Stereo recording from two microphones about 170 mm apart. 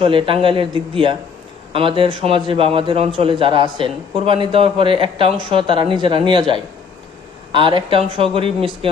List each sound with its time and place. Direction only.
0.0 s a man's voice: 30° right (ahead or behind)
7.5 s a man's voice: 30° right (ahead or behind)